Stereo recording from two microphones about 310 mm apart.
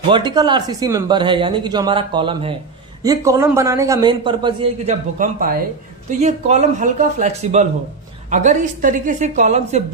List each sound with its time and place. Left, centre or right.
0.1 s a man's voice: centre